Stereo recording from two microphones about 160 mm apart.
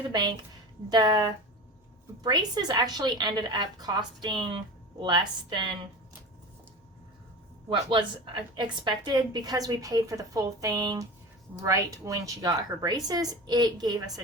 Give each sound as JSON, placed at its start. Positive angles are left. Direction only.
{"t": 0.1, "sound": "a woman's voice", "side_deg": -30}
{"t": 7.7, "sound": "a woman's voice", "side_deg": -30}